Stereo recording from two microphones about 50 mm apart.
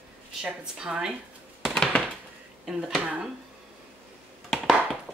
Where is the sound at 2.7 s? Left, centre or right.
Centre.